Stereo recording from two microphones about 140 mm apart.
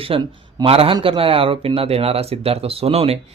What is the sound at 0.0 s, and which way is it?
Speech, 40° right (ahead or behind).